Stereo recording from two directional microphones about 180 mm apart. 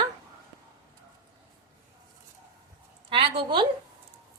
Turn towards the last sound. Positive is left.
turn(degrees=-30)  # may be behind; listen again after turning